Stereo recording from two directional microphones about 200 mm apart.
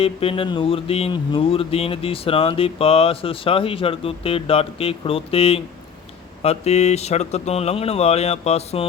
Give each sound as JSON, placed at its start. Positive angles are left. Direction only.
{"t": 0.0, "sound": "speech", "side_deg": 30}